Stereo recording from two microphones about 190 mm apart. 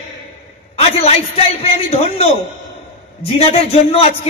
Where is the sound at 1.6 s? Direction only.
30° left (ahead or behind).